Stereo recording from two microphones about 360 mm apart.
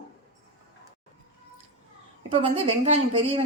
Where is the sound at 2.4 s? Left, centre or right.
Centre.